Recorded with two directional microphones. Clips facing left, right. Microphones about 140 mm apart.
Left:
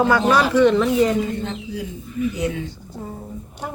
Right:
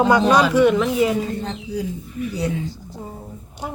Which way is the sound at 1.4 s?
35° right (ahead or behind).